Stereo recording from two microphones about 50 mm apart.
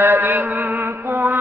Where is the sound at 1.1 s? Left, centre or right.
Right.